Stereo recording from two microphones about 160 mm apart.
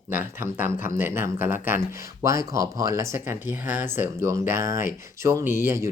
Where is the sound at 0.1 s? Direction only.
10° right (ahead or behind).